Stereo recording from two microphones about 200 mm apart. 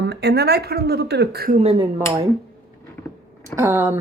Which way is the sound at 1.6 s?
30° right (ahead or behind).